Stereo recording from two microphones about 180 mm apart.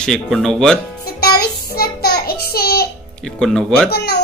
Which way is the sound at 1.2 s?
60° left (ahead or behind).